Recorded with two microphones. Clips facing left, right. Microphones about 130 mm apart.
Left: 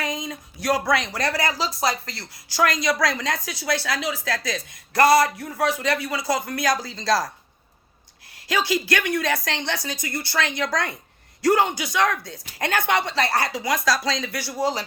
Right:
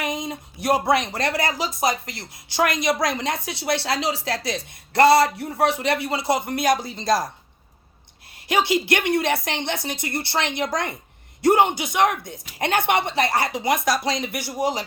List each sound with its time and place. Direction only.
0.0 s speech: 25° right (ahead or behind)
8.4 s speech: 25° right (ahead or behind)